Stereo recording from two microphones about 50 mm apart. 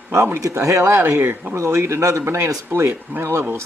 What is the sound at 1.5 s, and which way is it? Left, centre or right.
Speech, right.